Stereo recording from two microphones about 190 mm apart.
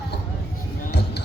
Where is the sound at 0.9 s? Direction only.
60° left (ahead or behind).